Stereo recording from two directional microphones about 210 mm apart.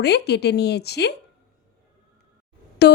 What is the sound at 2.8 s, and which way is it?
Speech, 50° left (ahead or behind).